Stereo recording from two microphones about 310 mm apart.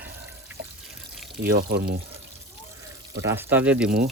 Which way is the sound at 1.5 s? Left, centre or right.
Right.